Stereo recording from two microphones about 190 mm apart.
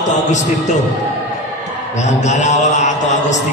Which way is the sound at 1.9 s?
40° left (ahead or behind).